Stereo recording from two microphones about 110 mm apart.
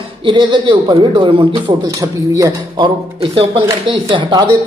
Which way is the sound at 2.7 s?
45° right (ahead or behind).